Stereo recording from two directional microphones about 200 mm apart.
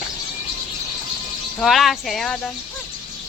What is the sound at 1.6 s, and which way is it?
Speech, centre (ahead or behind).